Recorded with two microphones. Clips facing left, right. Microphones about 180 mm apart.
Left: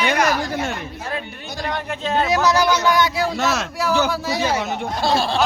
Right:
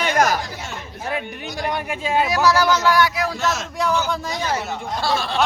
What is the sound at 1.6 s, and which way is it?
Speech, 10° right (ahead or behind).